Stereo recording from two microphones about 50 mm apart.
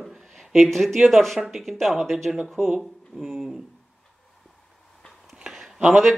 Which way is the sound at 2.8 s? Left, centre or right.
Centre.